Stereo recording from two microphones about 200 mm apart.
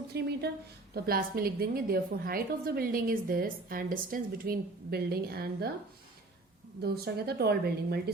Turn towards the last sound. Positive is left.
turn(degrees=-55)  # may be behind; listen again after turning